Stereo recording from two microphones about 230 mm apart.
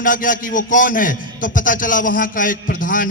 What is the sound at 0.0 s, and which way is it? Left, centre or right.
A man's voice, left.